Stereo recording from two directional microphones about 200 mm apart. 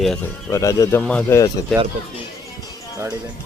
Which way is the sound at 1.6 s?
20° left (ahead or behind).